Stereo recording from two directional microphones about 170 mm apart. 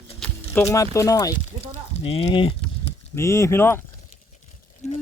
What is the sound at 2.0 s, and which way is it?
Speech, 30° left (ahead or behind).